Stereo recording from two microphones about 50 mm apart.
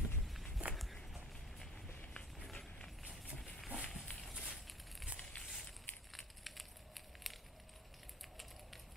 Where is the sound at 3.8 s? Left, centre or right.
Centre.